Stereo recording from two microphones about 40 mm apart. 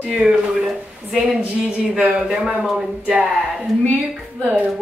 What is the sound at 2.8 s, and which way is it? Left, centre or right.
Speech, right.